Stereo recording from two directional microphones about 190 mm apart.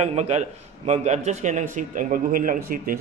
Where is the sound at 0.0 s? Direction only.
35° right (ahead or behind).